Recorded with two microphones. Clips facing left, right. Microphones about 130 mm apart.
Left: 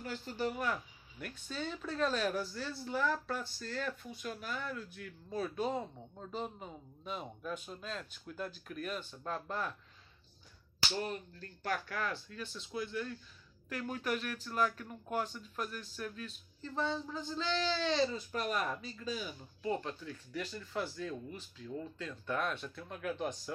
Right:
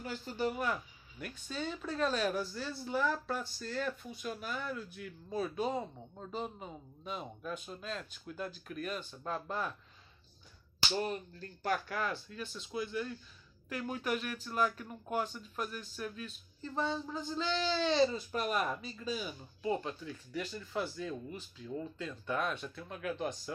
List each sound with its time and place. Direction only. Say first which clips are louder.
0.0 s speech: right 2 dB; 5° right (ahead or behind)
11.0 s speech: right 3 dB; 20° right (ahead or behind)
12.1 s speech: right 1 dB; 5° right (ahead or behind)